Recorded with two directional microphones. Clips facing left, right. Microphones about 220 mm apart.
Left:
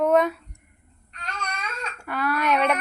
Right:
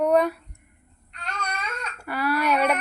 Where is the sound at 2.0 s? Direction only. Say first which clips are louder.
Right 1 dB; 5° right (ahead or behind).